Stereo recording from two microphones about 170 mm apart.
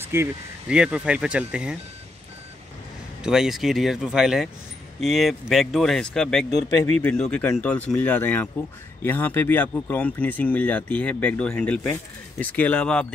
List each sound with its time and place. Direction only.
0.0 s speech: 15° right (ahead or behind)
3.2 s speech: 5° right (ahead or behind)